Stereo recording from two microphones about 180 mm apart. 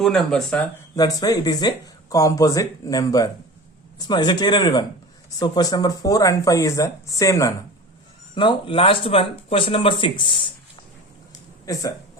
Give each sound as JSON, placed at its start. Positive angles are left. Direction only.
{"t": 0.0, "sound": "speech", "side_deg": 5}
{"t": 0.9, "sound": "speech", "side_deg": 20}
{"t": 8.4, "sound": "speech", "side_deg": 30}
{"t": 11.6, "sound": "speech", "side_deg": 20}